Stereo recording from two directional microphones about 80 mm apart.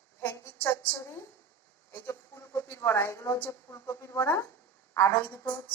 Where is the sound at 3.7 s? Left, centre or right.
Left.